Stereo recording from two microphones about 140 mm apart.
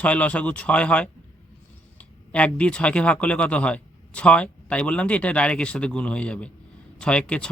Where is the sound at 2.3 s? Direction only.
10° left (ahead or behind).